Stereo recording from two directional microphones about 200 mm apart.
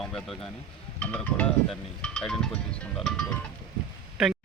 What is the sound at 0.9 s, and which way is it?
Speech, 10° left (ahead or behind).